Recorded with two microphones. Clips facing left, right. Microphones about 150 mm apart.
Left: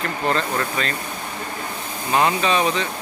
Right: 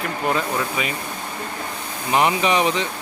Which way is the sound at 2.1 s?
15° right (ahead or behind).